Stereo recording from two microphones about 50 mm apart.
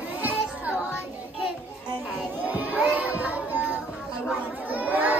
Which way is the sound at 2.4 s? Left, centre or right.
Right.